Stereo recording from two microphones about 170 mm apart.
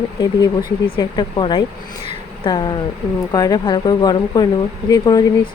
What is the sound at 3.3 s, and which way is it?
Speech, 25° left (ahead or behind).